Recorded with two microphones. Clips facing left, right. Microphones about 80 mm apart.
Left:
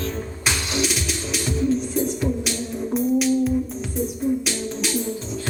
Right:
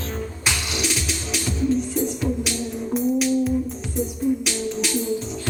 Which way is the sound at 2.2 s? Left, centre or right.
Left.